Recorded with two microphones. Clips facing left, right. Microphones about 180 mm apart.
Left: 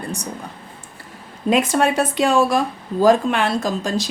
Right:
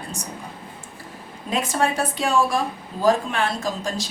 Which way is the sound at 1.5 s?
70° left (ahead or behind).